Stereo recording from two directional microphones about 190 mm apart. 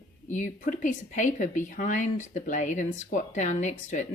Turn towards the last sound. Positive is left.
turn(degrees=40)  # may be behind; listen again after turning